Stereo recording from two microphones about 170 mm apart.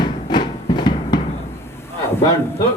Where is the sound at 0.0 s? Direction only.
25° left (ahead or behind).